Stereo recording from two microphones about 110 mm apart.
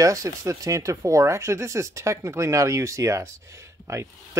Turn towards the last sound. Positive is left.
turn(degrees=-25)  # may be behind; listen again after turning